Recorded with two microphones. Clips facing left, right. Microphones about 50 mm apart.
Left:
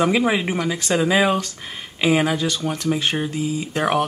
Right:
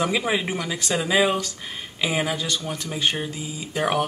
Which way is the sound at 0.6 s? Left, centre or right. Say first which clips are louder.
Left 5 dB; left.